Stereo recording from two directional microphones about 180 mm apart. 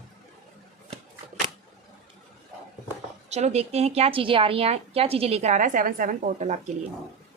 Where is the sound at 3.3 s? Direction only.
40° right (ahead or behind).